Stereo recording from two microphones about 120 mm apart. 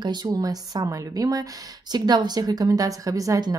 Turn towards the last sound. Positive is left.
turn(degrees=-30)  # may be behind; listen again after turning